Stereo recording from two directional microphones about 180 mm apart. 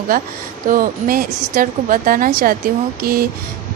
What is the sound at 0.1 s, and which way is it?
A woman's voice, 50° right (ahead or behind).